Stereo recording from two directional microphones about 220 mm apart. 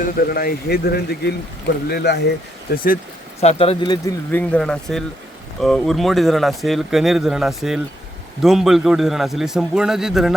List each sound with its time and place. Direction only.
0.0 s speech: 45° left (ahead or behind)
3.4 s speech: 25° left (ahead or behind)
4.3 s speech: 5° left (ahead or behind)